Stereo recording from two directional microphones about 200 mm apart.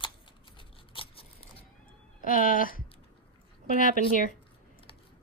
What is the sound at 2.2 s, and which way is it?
Speech, 45° left (ahead or behind).